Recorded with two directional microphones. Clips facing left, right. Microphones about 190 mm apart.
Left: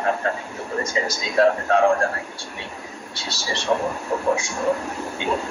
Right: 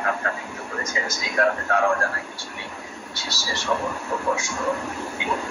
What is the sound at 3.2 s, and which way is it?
Speech, 25° left (ahead or behind).